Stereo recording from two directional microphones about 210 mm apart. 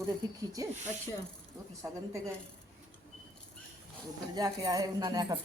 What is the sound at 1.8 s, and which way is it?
Speech, 15° right (ahead or behind).